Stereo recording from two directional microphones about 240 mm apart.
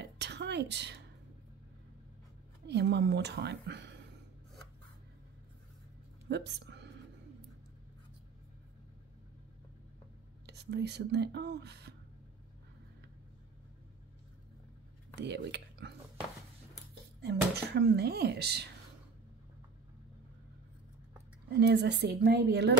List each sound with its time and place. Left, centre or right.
0.0 s a sound: right
2.7 s speech: right
6.2 s a woman's voice: right
10.4 s speech: right
15.1 s speech: right
17.2 s speech: right
21.5 s speech: right